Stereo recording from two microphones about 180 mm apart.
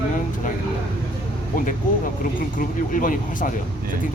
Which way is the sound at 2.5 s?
50° left (ahead or behind).